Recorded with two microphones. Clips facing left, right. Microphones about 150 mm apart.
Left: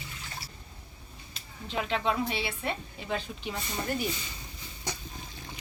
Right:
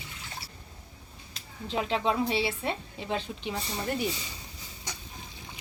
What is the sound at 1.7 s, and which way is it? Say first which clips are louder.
A woman's voice: right 2 dB; 30° right (ahead or behind).